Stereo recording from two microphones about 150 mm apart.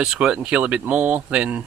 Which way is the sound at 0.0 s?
5° right (ahead or behind).